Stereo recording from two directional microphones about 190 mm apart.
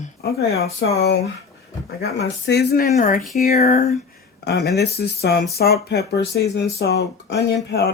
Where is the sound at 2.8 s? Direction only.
45° left (ahead or behind).